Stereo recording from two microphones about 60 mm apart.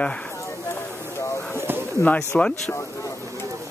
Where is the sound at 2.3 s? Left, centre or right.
Centre.